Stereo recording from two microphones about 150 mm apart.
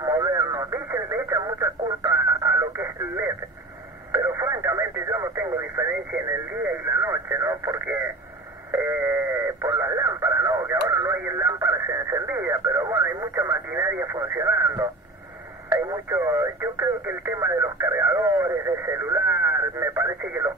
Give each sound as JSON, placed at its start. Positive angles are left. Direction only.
{"t": 0.0, "sound": "radio", "side_deg": -20}
{"t": 4.1, "sound": "speech", "side_deg": -15}
{"t": 8.7, "sound": "a sound", "side_deg": -15}
{"t": 14.1, "sound": "speech", "side_deg": -20}